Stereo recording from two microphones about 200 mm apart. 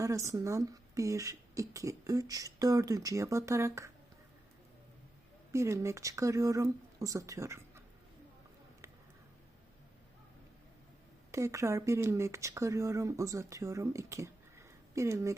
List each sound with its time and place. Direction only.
0.0 s speech: 15° right (ahead or behind)
5.5 s speech: 15° right (ahead or behind)
11.3 s speech: 15° right (ahead or behind)